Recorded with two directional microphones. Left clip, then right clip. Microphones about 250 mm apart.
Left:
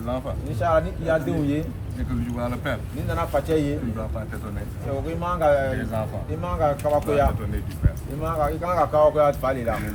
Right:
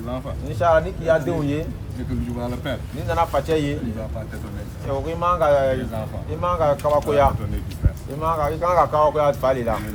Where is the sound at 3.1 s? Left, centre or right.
Right.